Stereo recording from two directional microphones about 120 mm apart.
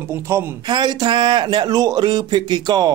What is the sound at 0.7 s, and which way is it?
Speech, 40° right (ahead or behind).